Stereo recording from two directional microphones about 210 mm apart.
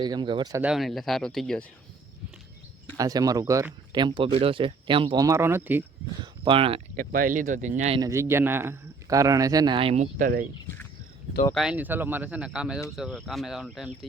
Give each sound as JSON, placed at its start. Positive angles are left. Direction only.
{"t": 0.0, "sound": "speech", "side_deg": -20}
{"t": 0.6, "sound": "speech", "side_deg": 0}
{"t": 3.0, "sound": "speech", "side_deg": -15}
{"t": 6.4, "sound": "speech", "side_deg": -25}
{"t": 6.9, "sound": "speech", "side_deg": -40}
{"t": 8.0, "sound": "speech", "side_deg": -15}
{"t": 11.5, "sound": "speech", "side_deg": -5}